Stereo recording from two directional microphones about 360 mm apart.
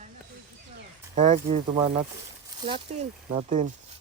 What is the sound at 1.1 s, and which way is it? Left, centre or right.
Speech, centre.